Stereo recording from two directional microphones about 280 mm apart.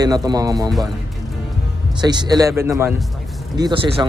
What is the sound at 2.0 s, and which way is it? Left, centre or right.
Speech, centre.